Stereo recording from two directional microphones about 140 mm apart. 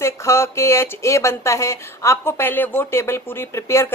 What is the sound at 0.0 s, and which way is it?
Speech, 20° left (ahead or behind).